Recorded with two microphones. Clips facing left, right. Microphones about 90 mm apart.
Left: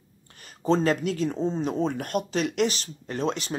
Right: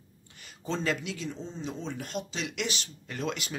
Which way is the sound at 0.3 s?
45° left (ahead or behind).